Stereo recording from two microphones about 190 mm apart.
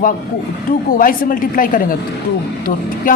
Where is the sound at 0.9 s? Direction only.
45° left (ahead or behind).